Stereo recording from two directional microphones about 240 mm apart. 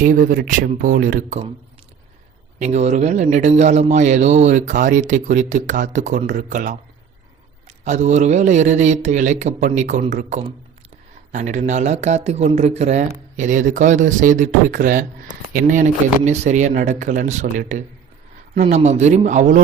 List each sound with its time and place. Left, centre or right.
0.0 s speech: right
2.6 s speech: right
7.9 s speech: right